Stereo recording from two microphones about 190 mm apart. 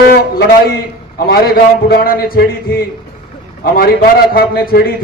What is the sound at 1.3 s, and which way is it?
A man's voice, 55° left (ahead or behind).